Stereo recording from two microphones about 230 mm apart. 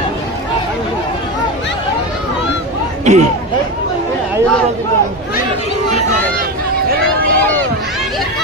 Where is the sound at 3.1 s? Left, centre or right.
Right.